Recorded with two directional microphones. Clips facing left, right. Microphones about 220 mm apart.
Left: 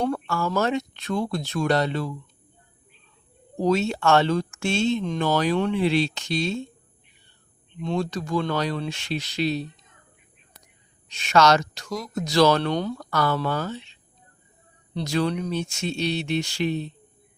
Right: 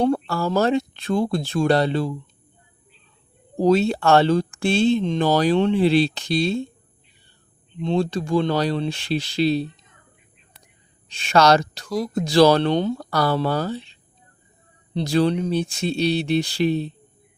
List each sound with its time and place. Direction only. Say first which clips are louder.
0.0 s speech: right 5 dB; 30° right (ahead or behind)
3.6 s speech: right 4 dB; 35° right (ahead or behind)
7.8 s speech: right 5 dB; 30° right (ahead or behind)
11.1 s speech: right 2 dB; 30° right (ahead or behind)